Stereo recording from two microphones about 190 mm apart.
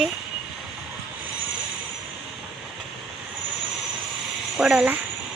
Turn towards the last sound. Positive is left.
turn(degrees=-5)  # may be behind; listen again after turning